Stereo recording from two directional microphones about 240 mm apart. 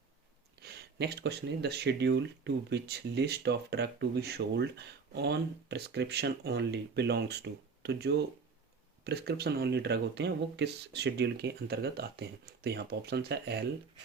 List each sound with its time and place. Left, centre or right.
0.6 s speech: right